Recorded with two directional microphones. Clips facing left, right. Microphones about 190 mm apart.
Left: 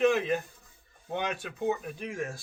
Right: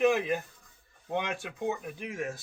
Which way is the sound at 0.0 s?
15° right (ahead or behind).